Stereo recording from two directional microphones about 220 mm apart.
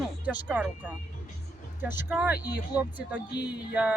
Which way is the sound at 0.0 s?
5° right (ahead or behind).